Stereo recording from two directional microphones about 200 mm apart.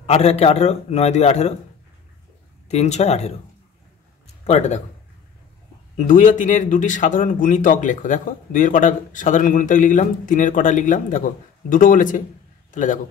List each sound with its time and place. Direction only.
0.0 s speech: 30° left (ahead or behind)
2.7 s speech: 35° left (ahead or behind)
4.5 s speech: 35° left (ahead or behind)
5.9 s speech: 40° left (ahead or behind)